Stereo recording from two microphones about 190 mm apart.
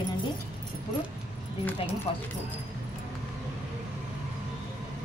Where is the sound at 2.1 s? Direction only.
30° left (ahead or behind).